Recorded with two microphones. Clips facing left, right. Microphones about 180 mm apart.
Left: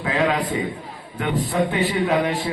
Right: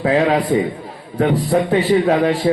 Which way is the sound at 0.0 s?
40° right (ahead or behind).